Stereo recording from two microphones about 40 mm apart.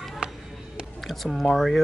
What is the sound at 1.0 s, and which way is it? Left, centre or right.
Speech, centre.